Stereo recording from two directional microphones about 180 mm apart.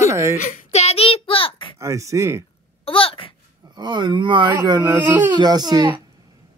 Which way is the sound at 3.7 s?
25° right (ahead or behind).